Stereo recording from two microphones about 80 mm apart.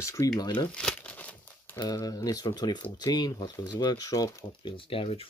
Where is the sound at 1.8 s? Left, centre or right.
Left.